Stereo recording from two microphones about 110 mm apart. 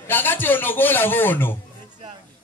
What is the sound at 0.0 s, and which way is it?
A man's voice, 20° left (ahead or behind).